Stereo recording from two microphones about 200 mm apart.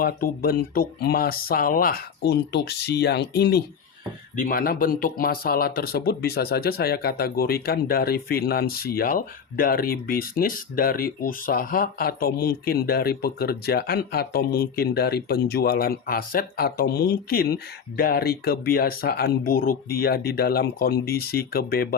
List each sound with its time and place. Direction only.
0.0 s speech: 50° left (ahead or behind)
4.4 s speech: 45° left (ahead or behind)